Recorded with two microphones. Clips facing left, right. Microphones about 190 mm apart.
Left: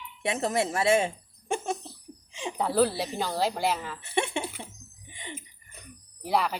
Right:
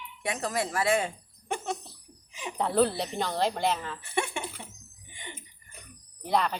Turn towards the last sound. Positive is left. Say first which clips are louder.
# even
turn(degrees=5)  # may be behind; listen again after turning